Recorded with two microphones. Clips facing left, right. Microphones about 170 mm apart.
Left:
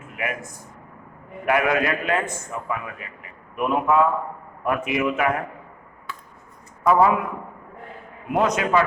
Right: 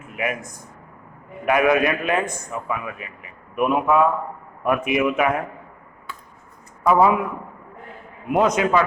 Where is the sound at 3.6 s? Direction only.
15° right (ahead or behind).